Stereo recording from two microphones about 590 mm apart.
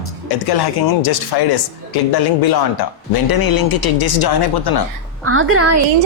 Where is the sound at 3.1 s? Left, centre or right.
Left.